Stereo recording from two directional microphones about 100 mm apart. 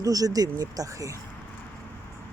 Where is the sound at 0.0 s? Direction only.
35° right (ahead or behind).